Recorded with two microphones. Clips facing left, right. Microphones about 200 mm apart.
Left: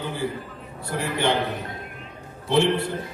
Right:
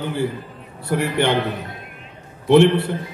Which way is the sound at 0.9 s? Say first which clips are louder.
Right 5 dB; 60° right (ahead or behind).